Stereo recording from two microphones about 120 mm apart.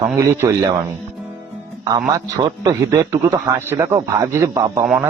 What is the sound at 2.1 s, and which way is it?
A man's voice, 30° right (ahead or behind).